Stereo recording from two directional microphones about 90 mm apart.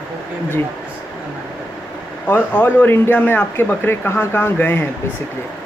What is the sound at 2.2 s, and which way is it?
Speech, 20° left (ahead or behind).